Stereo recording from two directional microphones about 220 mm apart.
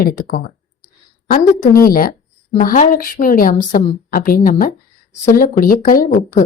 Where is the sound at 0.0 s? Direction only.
40° left (ahead or behind).